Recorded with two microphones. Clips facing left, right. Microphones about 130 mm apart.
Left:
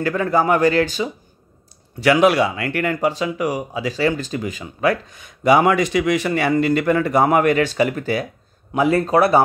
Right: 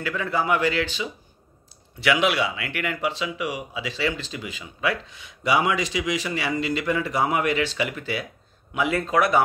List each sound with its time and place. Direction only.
0.0 s speech: 45° left (ahead or behind)